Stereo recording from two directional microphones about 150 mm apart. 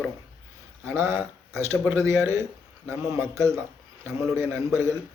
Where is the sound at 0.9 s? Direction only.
15° right (ahead or behind).